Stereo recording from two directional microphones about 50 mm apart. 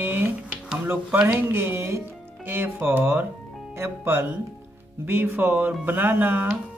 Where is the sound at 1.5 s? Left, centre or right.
Right.